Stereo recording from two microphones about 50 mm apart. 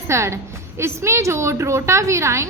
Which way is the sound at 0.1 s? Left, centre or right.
Right.